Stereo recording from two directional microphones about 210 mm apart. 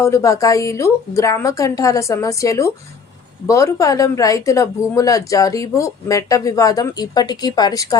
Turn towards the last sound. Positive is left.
turn(degrees=15)  # may be behind; listen again after turning